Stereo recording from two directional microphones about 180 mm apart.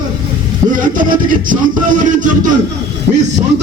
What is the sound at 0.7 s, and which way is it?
Speech, 50° right (ahead or behind).